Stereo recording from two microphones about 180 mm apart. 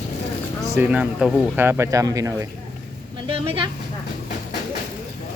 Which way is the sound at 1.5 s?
15° right (ahead or behind).